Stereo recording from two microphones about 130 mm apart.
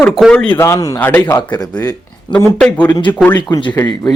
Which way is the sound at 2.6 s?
10° left (ahead or behind).